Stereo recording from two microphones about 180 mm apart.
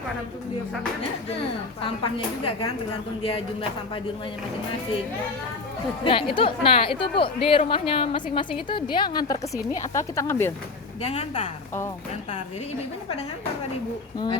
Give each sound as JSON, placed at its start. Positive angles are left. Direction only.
{"t": 1.8, "sound": "a woman's voice", "side_deg": 30}
{"t": 6.1, "sound": "a woman's voice", "side_deg": 30}
{"t": 11.0, "sound": "speech", "side_deg": 35}